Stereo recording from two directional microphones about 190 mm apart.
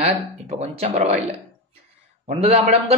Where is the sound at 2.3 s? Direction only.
35° right (ahead or behind).